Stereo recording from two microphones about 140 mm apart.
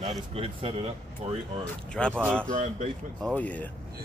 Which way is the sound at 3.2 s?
10° left (ahead or behind).